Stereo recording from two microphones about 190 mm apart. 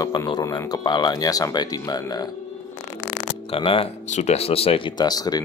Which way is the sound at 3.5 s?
30° left (ahead or behind).